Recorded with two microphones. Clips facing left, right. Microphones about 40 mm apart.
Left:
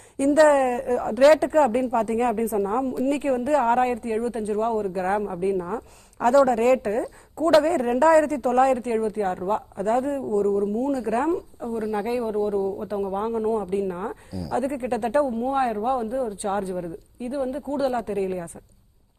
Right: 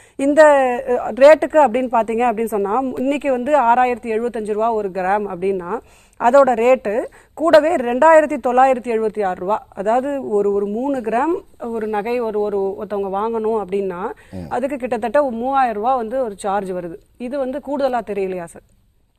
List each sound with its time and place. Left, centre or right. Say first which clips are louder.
0.2 s a man's voice: right 6 dB; right